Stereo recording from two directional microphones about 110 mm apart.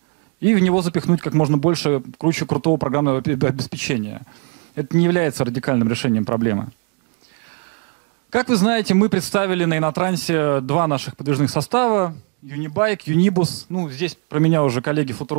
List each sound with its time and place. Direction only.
0.4 s speech: 15° right (ahead or behind)
8.3 s speech: 15° right (ahead or behind)